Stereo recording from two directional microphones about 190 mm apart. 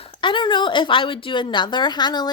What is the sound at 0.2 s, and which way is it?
A woman's voice, 25° left (ahead or behind).